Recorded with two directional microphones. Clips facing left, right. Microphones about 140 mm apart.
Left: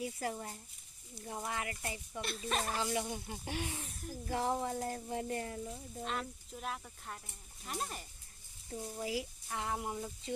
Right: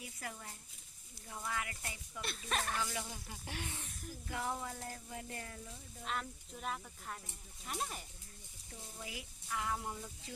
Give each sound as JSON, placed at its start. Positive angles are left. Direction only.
{"t": 0.0, "sound": "speech", "side_deg": 30}
{"t": 2.2, "sound": "speech", "side_deg": 0}
{"t": 2.6, "sound": "speech", "side_deg": 25}
{"t": 3.6, "sound": "speech", "side_deg": 15}
{"t": 4.1, "sound": "speech", "side_deg": 30}
{"t": 6.1, "sound": "speech", "side_deg": 0}
{"t": 8.7, "sound": "speech", "side_deg": 30}
{"t": 9.8, "sound": "speech", "side_deg": 20}